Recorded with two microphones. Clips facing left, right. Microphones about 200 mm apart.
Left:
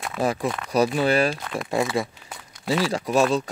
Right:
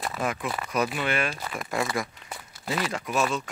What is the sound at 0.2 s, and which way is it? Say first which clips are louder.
Speech: left 7 dB; 35° left (ahead or behind).